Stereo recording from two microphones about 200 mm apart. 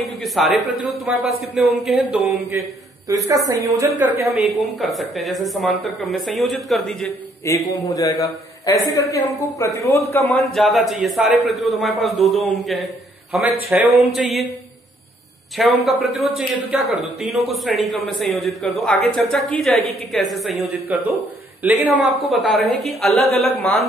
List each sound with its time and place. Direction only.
0.1 s a woman's voice: centre (ahead or behind); by 3.9 s 15° right (ahead or behind)
4.2 s a woman's voice: centre (ahead or behind)
7.4 s a man's voice: 15° left (ahead or behind); by 14.4 s centre (ahead or behind)
15.5 s a woman's voice: centre (ahead or behind)